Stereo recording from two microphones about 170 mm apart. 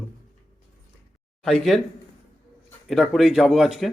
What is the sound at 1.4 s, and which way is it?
Speech, centre (ahead or behind).